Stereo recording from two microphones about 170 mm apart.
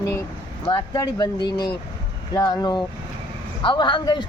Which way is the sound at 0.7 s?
25° left (ahead or behind).